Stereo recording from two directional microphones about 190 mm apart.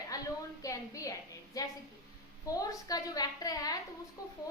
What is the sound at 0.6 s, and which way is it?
A woman's voice, 15° left (ahead or behind).